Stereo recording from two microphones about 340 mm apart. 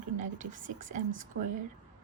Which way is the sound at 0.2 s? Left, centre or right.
Right.